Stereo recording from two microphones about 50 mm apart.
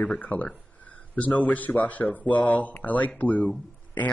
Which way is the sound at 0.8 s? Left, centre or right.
Left.